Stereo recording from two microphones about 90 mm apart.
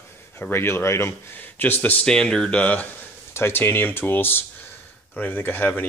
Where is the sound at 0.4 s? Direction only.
25° left (ahead or behind).